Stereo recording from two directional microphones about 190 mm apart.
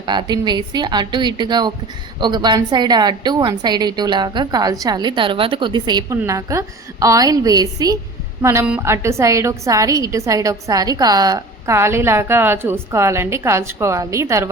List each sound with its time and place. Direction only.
0.0 s a woman's voice: 25° right (ahead or behind)